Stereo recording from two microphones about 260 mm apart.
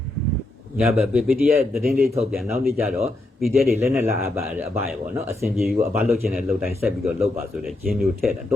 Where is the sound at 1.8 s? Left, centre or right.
Right.